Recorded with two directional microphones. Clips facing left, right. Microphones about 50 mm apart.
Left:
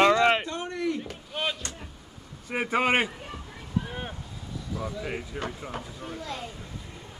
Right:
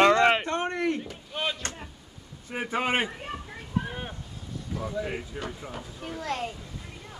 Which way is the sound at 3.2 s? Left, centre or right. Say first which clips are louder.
Right 3 dB; right.